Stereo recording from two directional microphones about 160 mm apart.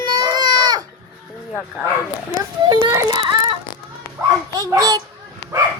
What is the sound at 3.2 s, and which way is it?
Synthetic singing, 30° right (ahead or behind).